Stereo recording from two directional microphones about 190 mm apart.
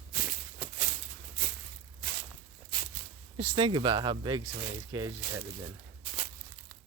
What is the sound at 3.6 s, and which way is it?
Speech, 25° right (ahead or behind).